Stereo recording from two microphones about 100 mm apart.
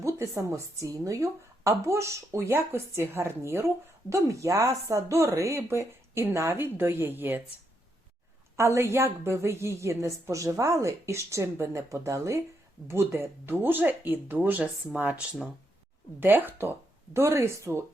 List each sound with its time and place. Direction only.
0.0 s a woman's voice: 30° right (ahead or behind)
8.5 s a woman's voice: 25° right (ahead or behind)
16.2 s a woman's voice: 20° right (ahead or behind)